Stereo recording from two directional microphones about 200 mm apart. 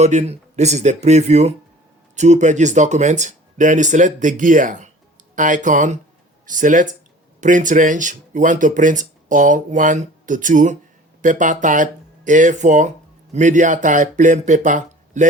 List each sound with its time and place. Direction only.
0.0 s speech: 35° right (ahead or behind)